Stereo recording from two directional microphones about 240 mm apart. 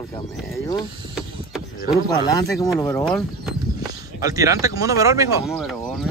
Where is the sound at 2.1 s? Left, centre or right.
Centre.